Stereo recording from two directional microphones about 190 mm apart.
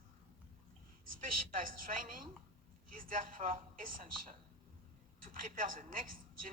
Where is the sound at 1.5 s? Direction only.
45° right (ahead or behind).